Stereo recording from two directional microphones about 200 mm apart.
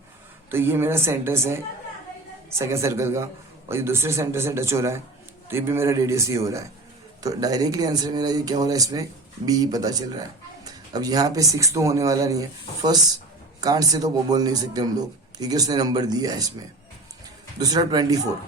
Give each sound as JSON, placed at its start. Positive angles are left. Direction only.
{"t": 0.5, "sound": "speech", "side_deg": -10}
{"t": 2.6, "sound": "speech", "side_deg": -15}
{"t": 17.6, "sound": "speech", "side_deg": -20}